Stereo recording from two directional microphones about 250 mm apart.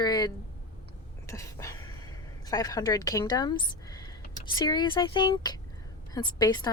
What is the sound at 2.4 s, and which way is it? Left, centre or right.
A woman's voice, centre.